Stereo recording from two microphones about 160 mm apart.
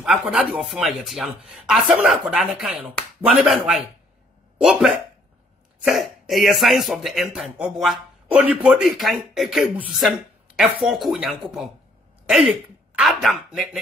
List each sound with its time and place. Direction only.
0.0 s speech: 5° right (ahead or behind)